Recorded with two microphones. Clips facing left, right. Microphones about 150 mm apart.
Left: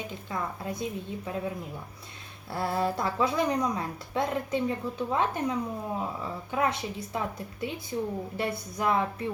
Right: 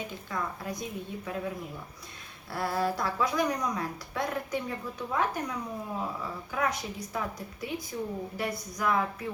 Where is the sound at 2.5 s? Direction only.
25° left (ahead or behind).